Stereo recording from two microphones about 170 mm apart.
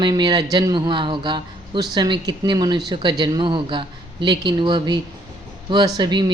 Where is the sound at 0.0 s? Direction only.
25° right (ahead or behind).